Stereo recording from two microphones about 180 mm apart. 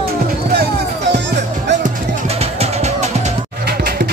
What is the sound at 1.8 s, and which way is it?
Music, 35° right (ahead or behind).